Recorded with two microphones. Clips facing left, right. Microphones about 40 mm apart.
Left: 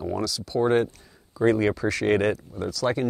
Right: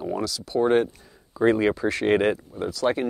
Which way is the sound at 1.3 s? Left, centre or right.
Centre.